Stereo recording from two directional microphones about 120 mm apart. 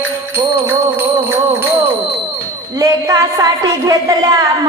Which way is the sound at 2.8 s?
30° right (ahead or behind).